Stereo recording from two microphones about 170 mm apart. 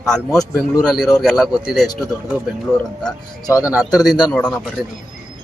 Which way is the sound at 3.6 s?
5° right (ahead or behind).